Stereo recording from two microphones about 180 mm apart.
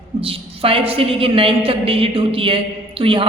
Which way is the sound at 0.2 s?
30° right (ahead or behind).